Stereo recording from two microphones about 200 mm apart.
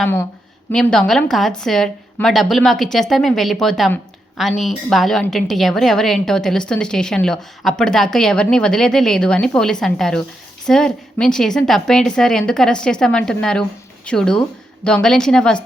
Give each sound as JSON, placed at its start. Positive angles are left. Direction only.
{"t": 0.0, "sound": "a woman's voice", "side_deg": 10}